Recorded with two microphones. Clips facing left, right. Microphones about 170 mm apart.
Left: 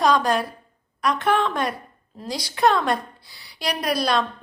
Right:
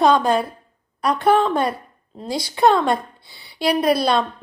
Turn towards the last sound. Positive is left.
turn(degrees=-30)  # may be behind; listen again after turning